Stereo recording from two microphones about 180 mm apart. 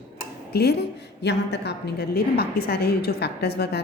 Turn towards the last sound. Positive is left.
turn(degrees=65)  # may be behind; listen again after turning